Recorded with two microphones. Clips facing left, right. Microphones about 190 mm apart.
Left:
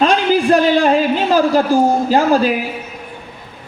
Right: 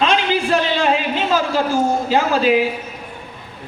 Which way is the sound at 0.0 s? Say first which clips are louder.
Left 4 dB; 40° left (ahead or behind).